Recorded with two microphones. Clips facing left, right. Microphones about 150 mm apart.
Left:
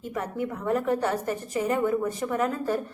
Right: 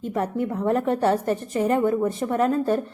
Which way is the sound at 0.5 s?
30° right (ahead or behind).